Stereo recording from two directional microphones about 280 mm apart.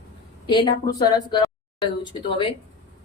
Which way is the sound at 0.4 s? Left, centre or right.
Centre.